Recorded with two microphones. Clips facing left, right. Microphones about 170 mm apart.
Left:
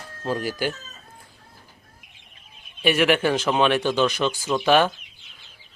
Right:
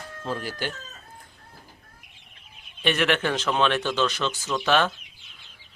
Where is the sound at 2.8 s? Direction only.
10° left (ahead or behind).